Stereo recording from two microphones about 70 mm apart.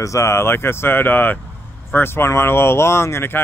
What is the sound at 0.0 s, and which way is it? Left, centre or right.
Speech, left.